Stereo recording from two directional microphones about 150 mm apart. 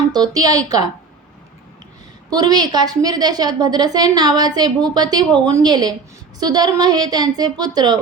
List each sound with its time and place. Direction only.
0.1 s a woman's voice: 25° right (ahead or behind)
2.3 s a woman's voice: 25° right (ahead or behind)